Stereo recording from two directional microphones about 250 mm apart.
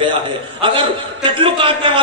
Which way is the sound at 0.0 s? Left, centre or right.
Centre.